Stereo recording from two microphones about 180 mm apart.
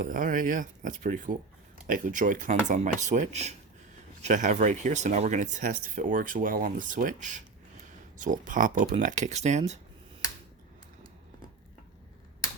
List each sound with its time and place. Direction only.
0.0 s speech: 45° right (ahead or behind)